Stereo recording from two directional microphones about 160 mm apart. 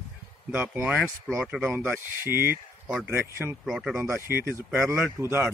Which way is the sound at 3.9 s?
15° right (ahead or behind).